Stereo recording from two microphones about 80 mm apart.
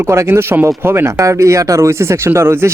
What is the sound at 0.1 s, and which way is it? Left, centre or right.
A man's voice, right.